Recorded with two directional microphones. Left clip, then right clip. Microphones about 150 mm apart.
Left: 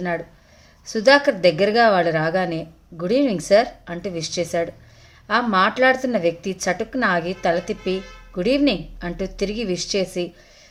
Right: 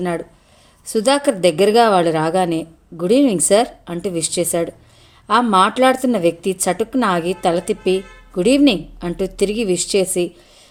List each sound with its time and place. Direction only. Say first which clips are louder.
0.9 s a woman's voice: left 1 dB; 35° right (ahead or behind)